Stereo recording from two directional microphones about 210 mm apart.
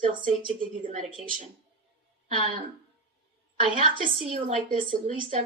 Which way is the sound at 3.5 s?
30° right (ahead or behind).